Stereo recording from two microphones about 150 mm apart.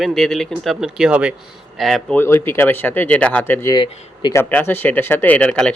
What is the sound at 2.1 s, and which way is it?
Speech, 15° left (ahead or behind).